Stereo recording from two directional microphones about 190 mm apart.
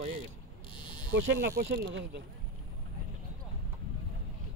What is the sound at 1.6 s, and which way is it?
Speech, 55° right (ahead or behind).